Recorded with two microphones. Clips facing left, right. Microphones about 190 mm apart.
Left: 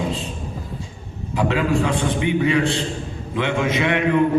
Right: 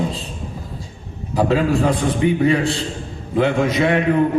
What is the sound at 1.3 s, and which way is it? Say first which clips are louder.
A man's voice: right 3 dB; 35° right (ahead or behind).